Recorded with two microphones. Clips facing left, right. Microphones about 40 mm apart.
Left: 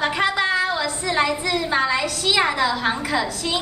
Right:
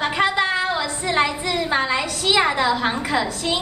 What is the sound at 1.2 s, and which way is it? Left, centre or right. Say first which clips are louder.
A woman's voice: even; right.